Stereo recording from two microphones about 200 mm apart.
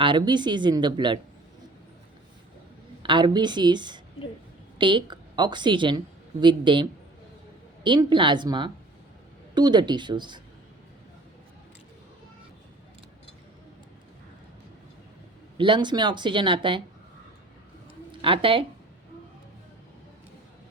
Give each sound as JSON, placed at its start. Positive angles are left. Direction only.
{"t": 0.0, "sound": "a woman's voice", "side_deg": -25}
{"t": 3.0, "sound": "a woman's voice", "side_deg": -25}
{"t": 7.9, "sound": "a woman's voice", "side_deg": -25}
{"t": 15.5, "sound": "a woman's voice", "side_deg": -25}
{"t": 18.1, "sound": "speech", "side_deg": -25}